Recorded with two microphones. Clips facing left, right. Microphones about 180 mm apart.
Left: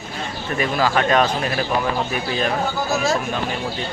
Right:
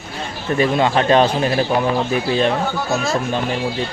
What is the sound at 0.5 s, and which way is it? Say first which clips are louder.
Speech: right 4 dB; 30° right (ahead or behind).